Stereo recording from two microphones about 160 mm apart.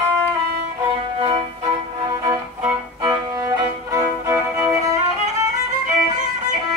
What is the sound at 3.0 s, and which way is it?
Music, 25° right (ahead or behind).